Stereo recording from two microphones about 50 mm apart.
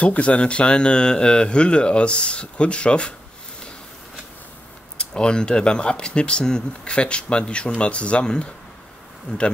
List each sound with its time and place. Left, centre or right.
0.0 s speech: left
4.9 s speech: centre